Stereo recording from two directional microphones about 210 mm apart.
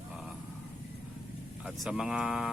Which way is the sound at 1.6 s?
Centre (ahead or behind).